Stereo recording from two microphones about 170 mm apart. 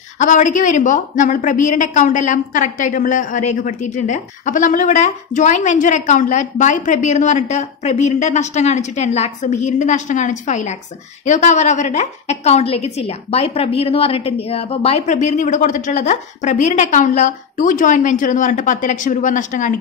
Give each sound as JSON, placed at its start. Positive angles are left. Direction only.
{"t": 0.2, "sound": "a woman's voice", "side_deg": 50}